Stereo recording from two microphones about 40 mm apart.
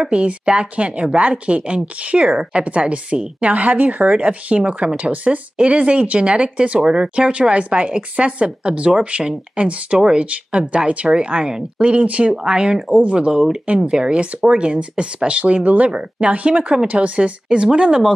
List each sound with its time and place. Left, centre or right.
0.0 s speech: right
3.4 s speech: right
10.6 s speech: centre
10.9 s speech: right
12.4 s speech: centre